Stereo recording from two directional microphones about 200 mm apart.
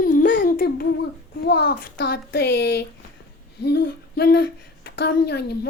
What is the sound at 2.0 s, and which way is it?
Speech, 55° left (ahead or behind).